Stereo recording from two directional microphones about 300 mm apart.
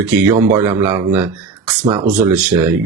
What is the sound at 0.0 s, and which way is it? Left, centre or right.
Speech, centre.